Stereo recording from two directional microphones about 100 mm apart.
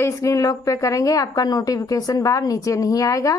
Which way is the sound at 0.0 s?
30° left (ahead or behind).